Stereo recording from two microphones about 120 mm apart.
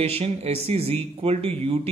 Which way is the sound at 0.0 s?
60° right (ahead or behind).